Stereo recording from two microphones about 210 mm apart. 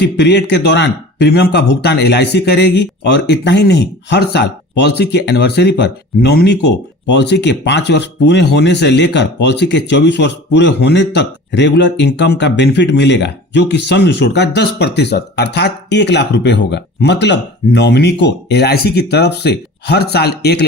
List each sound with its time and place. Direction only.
0.0 s a man's voice: 55° left (ahead or behind)